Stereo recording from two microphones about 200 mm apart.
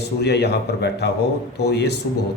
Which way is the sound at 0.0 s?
55° left (ahead or behind).